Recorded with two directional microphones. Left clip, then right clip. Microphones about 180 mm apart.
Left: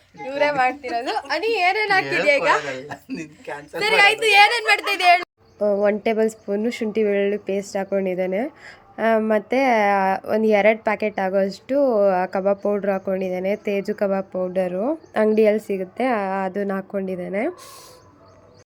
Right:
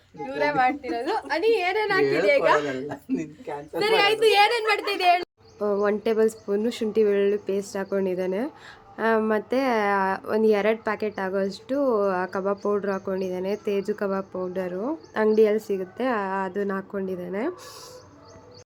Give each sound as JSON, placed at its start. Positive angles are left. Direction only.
{"t": 0.3, "sound": "a woman's voice", "side_deg": 35}
{"t": 2.9, "sound": "a woman's voice", "side_deg": -10}
{"t": 3.8, "sound": "a woman's voice", "side_deg": 35}
{"t": 5.5, "sound": "speech", "side_deg": 10}